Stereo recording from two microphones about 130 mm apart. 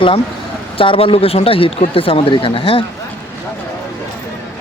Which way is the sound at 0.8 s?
45° left (ahead or behind).